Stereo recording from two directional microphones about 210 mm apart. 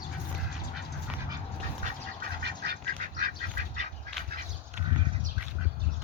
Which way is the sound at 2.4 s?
50° right (ahead or behind).